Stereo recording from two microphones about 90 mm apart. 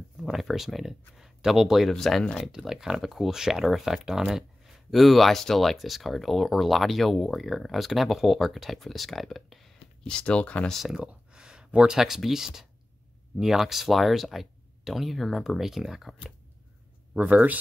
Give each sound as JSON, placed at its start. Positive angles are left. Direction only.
{"t": 0.2, "sound": "speech", "side_deg": 0}
{"t": 10.7, "sound": "speech", "side_deg": -5}
{"t": 17.1, "sound": "speech", "side_deg": -15}